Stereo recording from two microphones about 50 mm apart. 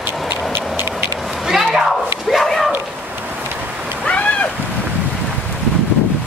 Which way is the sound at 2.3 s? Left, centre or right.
Centre.